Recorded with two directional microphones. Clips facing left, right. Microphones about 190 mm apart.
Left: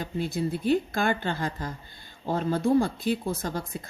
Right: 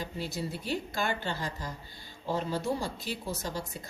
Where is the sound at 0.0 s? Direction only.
55° left (ahead or behind).